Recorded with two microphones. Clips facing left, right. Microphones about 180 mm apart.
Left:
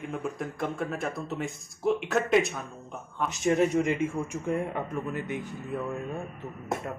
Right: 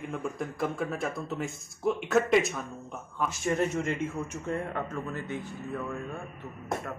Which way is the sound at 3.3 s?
15° left (ahead or behind).